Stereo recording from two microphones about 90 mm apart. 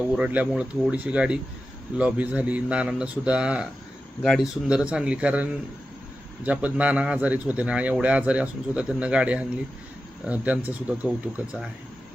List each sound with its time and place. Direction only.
0.1 s a man's voice: 15° right (ahead or behind)